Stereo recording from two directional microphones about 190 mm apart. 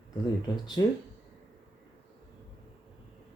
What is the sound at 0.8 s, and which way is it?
Speech, 20° left (ahead or behind).